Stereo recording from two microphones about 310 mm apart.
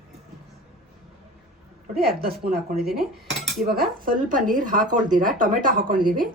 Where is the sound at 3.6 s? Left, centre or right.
Right.